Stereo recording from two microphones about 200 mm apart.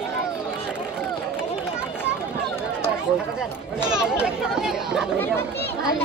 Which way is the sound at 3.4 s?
5° right (ahead or behind).